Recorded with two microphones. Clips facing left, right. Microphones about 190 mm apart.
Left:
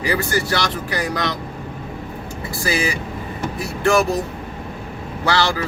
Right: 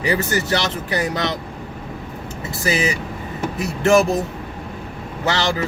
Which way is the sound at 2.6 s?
20° right (ahead or behind).